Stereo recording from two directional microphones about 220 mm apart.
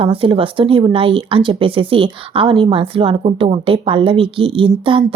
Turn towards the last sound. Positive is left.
turn(degrees=-25)  # may be behind; listen again after turning